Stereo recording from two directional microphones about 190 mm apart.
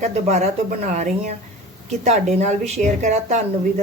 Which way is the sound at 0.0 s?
35° right (ahead or behind).